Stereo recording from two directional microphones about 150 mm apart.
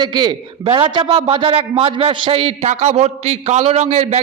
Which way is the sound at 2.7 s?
50° right (ahead or behind).